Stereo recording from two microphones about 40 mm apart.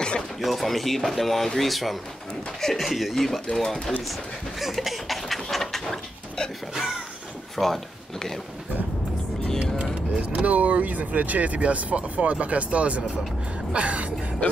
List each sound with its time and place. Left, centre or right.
0.4 s speech: centre
4.6 s a sound: centre
7.5 s speech: centre
10.1 s speech: right
14.4 s speech: left